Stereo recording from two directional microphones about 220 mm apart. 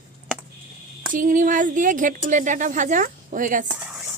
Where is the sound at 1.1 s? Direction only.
35° right (ahead or behind).